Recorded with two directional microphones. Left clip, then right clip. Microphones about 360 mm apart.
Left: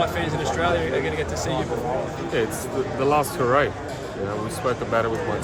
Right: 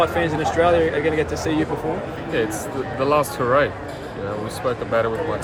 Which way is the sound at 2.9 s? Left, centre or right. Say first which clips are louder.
Right 2 dB; centre.